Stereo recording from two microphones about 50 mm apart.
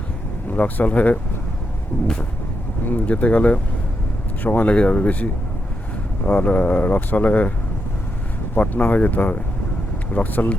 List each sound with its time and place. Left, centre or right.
0.5 s speech: left
1.9 s vehicle: left
2.8 s speech: left
8.5 s speech: left